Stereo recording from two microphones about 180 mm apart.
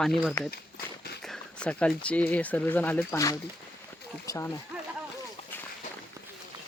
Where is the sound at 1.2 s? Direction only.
5° left (ahead or behind).